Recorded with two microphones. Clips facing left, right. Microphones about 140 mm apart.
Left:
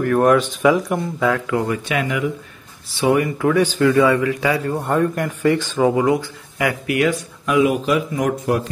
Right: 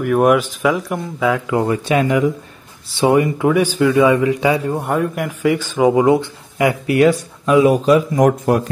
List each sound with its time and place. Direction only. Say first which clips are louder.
0.0 s speech: right 1 dB; 10° right (ahead or behind)
1.3 s speech: right 3 dB; 25° right (ahead or behind)
7.0 s speech: right 8 dB; 35° right (ahead or behind)